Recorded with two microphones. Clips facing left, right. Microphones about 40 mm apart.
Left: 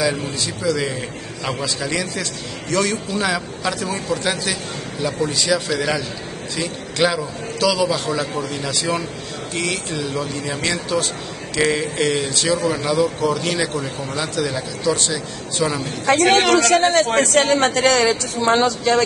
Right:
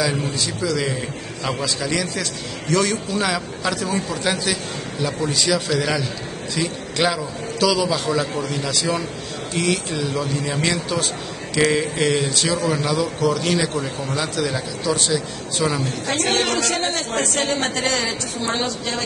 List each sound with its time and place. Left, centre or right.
0.0 s speech: centre
16.2 s a woman's voice: left
17.1 s a woman's voice: left